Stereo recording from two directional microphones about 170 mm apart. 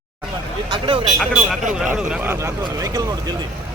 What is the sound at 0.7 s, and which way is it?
Speech, 30° right (ahead or behind).